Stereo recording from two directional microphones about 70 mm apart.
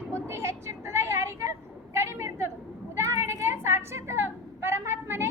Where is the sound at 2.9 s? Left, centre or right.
Right.